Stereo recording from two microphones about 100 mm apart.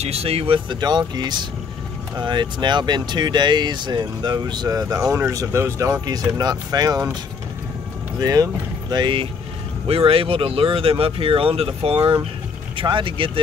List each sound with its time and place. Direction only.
0.0 s speech: 85° right; by 0.7 s 70° right (ahead or behind)
0.7 s speech: 45° right (ahead or behind)
6.0 s speech: 40° right (ahead or behind)
8.2 s speech: 35° right (ahead or behind)
8.9 s speech: 55° right (ahead or behind)
9.8 s speech: 70° right (ahead or behind)
12.7 s speech: 55° right (ahead or behind)